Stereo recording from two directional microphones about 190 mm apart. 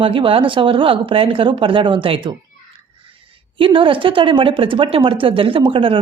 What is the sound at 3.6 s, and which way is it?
Speech, 25° right (ahead or behind).